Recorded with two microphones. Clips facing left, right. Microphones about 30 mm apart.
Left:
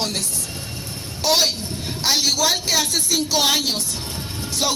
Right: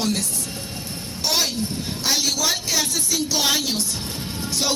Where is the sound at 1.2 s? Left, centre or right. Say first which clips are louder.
Left 4 dB; left.